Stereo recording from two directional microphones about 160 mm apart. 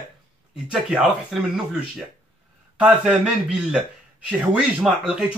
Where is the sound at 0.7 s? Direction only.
Centre (ahead or behind).